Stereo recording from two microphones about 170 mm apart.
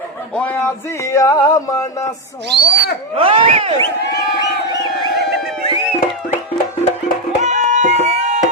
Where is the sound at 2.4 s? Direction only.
85° right.